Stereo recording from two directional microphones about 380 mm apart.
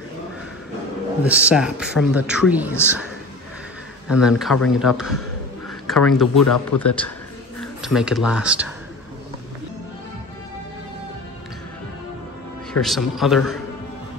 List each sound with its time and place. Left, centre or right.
1.2 s a woman's voice: centre
4.1 s speech: centre
6.4 s speech: left
6.8 s speech: centre
12.7 s speech: centre